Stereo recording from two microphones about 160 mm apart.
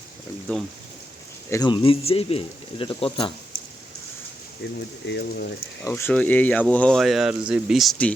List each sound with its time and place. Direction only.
0.5 s speech: 10° left (ahead or behind)
1.5 s speech: 25° left (ahead or behind)
4.6 s speech: 90° left
5.8 s speech: 15° left (ahead or behind)